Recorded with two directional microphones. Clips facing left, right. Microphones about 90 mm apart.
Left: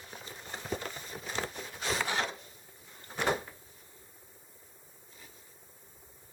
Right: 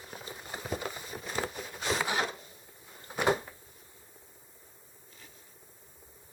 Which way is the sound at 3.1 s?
10° right (ahead or behind).